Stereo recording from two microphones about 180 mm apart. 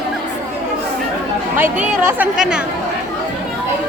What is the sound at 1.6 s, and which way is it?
Speech, 15° right (ahead or behind).